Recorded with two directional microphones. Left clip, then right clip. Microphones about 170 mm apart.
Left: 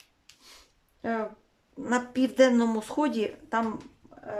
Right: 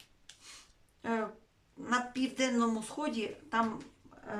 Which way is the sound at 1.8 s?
45° left (ahead or behind).